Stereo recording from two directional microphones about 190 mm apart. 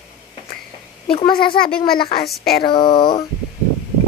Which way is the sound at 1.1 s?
30° left (ahead or behind).